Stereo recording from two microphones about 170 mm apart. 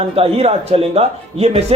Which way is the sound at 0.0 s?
35° right (ahead or behind).